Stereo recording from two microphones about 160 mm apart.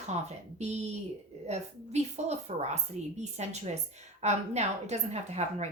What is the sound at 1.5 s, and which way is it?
A woman's voice, 45° right (ahead or behind).